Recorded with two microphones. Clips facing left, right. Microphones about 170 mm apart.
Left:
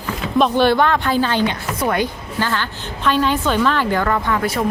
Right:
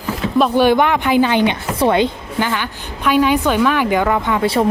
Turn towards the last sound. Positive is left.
turn(degrees=-15)  # may be behind; listen again after turning